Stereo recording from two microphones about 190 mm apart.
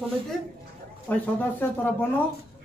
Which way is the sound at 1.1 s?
10° left (ahead or behind).